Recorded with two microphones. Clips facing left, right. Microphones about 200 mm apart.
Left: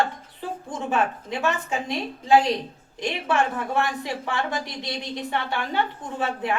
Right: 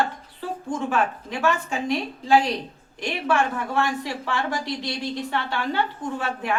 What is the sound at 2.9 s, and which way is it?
A woman's voice, 20° left (ahead or behind).